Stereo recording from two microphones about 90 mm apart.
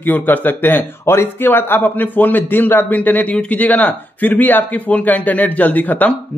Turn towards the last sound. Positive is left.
turn(degrees=20)  # may be behind; listen again after turning